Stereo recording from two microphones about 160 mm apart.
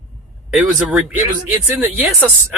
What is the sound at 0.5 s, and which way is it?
Speech, 10° right (ahead or behind).